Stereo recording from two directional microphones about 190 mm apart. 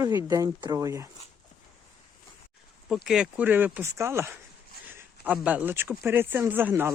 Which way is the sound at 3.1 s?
5° right (ahead or behind).